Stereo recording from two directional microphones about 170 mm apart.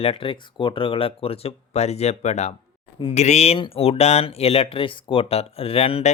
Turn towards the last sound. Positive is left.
turn(degrees=35)  # may be behind; listen again after turning